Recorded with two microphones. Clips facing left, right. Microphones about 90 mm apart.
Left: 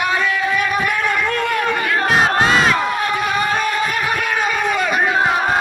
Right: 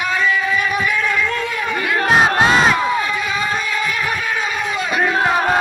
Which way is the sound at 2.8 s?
60° left (ahead or behind).